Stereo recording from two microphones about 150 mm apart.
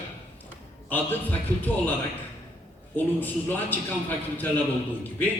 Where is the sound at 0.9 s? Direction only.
10° left (ahead or behind).